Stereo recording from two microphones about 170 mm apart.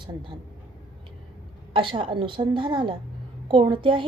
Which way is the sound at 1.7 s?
30° right (ahead or behind).